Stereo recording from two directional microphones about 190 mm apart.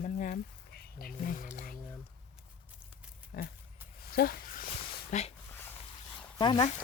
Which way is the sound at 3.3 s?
55° left (ahead or behind).